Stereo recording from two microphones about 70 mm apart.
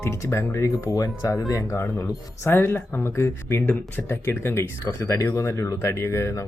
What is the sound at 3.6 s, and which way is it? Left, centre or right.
Speech, left.